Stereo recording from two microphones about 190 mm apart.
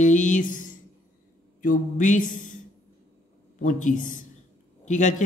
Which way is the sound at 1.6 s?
45° left (ahead or behind).